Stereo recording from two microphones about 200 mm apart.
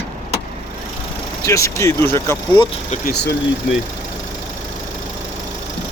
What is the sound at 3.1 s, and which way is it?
Speech, 55° left (ahead or behind).